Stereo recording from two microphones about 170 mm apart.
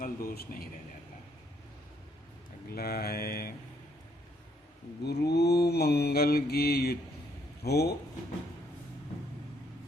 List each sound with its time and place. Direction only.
0.0 s a man's voice: 60° left (ahead or behind)
2.6 s mantra: 65° left (ahead or behind)
5.0 s mantra: 75° left (ahead or behind)